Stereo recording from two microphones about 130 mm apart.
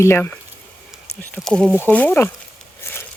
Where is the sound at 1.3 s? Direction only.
5° left (ahead or behind).